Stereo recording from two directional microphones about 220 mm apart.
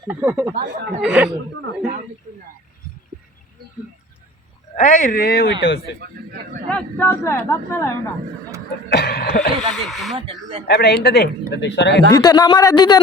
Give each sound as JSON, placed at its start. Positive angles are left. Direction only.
{"t": 0.1, "sound": "speech", "side_deg": -10}
{"t": 4.7, "sound": "speech", "side_deg": 35}
{"t": 5.6, "sound": "speech", "side_deg": 55}
{"t": 6.7, "sound": "speech", "side_deg": 5}
{"t": 8.9, "sound": "speech", "side_deg": 45}
{"t": 9.7, "sound": "speech", "side_deg": 0}
{"t": 10.2, "sound": "speech", "side_deg": -25}
{"t": 10.7, "sound": "speech", "side_deg": 45}
{"t": 12.1, "sound": "speech", "side_deg": 15}